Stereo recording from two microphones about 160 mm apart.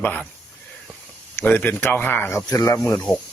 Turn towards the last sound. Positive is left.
turn(degrees=15)  # may be behind; listen again after turning